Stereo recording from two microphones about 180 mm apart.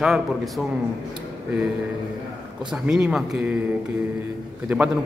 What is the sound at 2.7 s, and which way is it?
Speech, 5° right (ahead or behind).